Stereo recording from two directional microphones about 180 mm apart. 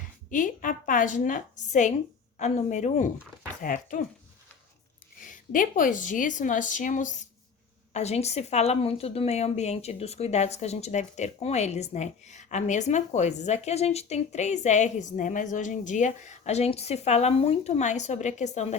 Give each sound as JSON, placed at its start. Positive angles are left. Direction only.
{"t": 0.3, "sound": "a woman's voice", "side_deg": 45}
{"t": 5.3, "sound": "a woman's voice", "side_deg": 50}